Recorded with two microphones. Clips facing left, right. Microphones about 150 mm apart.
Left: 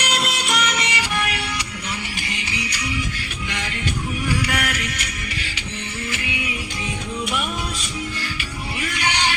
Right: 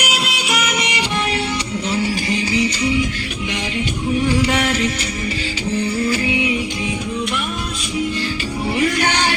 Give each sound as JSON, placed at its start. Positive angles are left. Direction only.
{"t": 0.0, "sound": "music", "side_deg": -5}
{"t": 4.2, "sound": "music", "side_deg": -25}
{"t": 9.0, "sound": "music", "side_deg": -50}